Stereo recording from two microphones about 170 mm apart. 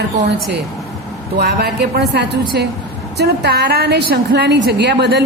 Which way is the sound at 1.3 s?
70° right (ahead or behind).